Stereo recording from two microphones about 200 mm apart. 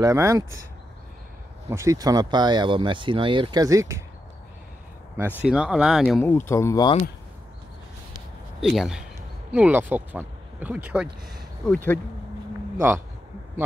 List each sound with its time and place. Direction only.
0.0 s speech: 15° right (ahead or behind)
1.7 s speech: 15° right (ahead or behind)
5.1 s speech: 5° right (ahead or behind)
6.0 s speech: 10° left (ahead or behind)
8.5 s speech: centre (ahead or behind)
11.6 s speech: 5° left (ahead or behind)